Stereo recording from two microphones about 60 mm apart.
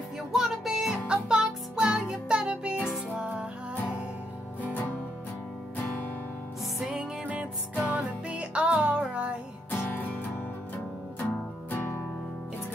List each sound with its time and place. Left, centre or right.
0.3 s music: centre
4.6 s music: left
6.9 s music: centre
9.7 s music: left